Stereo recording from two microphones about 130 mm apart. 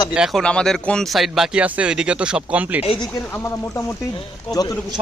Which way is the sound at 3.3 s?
20° left (ahead or behind).